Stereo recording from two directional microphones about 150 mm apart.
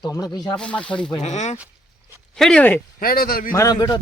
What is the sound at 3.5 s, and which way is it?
Speech, 25° left (ahead or behind).